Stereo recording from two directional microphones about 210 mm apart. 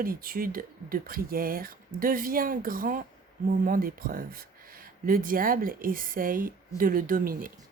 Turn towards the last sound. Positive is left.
turn(degrees=-40)  # may be behind; listen again after turning